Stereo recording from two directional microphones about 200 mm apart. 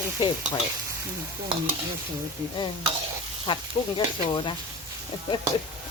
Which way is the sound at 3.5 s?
25° left (ahead or behind).